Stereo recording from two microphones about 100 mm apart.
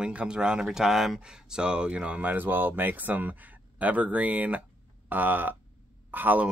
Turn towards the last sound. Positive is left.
turn(degrees=-20)  # may be behind; listen again after turning